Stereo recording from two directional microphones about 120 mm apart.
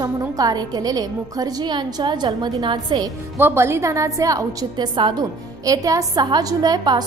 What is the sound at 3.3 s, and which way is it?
A woman's voice, 20° right (ahead or behind).